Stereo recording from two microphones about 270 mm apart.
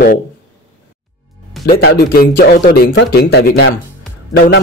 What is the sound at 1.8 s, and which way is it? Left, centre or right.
Speech, left.